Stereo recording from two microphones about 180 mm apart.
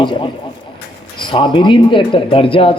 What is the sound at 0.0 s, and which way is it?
A man's voice, 25° left (ahead or behind).